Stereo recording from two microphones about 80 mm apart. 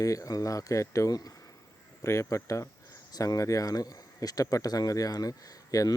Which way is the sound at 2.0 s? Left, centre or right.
Left.